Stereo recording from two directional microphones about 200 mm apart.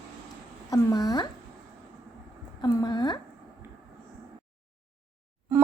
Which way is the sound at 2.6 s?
20° left (ahead or behind).